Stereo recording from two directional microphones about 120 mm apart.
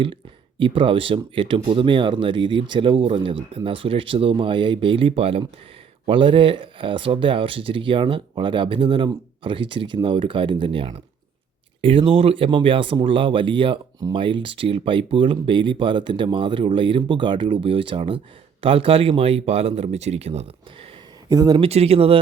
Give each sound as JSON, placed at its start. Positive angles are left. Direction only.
{"t": 0.6, "sound": "speech", "side_deg": -45}
{"t": 21.2, "sound": "speech", "side_deg": -30}
{"t": 21.6, "sound": "speech", "side_deg": -60}